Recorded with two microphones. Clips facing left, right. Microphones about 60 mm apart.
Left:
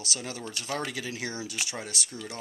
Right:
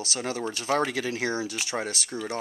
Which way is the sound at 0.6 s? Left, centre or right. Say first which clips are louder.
Right 8 dB; right.